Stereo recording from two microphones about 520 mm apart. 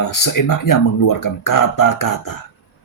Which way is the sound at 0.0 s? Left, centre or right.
Left.